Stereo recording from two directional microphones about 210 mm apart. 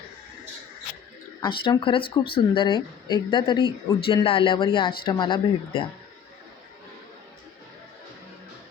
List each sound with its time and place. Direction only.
1.4 s speech: 20° left (ahead or behind)